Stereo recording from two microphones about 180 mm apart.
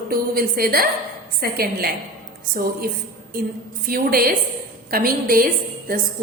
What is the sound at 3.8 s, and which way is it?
A woman's voice, 55° right (ahead or behind).